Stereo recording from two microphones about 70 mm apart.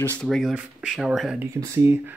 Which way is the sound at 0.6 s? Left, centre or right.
Centre.